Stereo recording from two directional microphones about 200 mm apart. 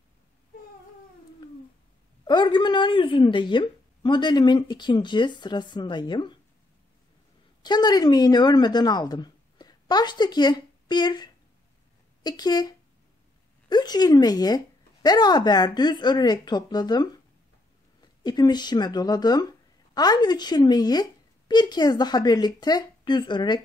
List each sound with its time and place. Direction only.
1.4 s cat: 20° left (ahead or behind)
2.2 s a woman's voice: 20° left (ahead or behind)
7.6 s a woman's voice: 20° left (ahead or behind)